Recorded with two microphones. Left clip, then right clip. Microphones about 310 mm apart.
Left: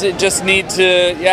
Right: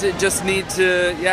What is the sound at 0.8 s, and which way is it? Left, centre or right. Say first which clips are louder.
Speech: left 4 dB; centre.